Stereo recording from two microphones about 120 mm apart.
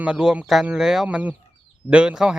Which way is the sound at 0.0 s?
5° right (ahead or behind).